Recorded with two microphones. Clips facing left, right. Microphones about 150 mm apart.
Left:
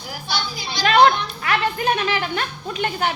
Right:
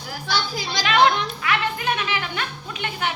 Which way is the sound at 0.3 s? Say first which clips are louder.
Right 2 dB; 90° right.